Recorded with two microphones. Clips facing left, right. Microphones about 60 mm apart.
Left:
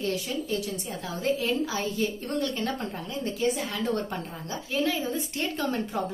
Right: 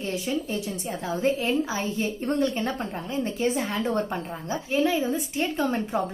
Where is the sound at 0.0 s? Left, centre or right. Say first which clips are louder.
Right 2 dB; right.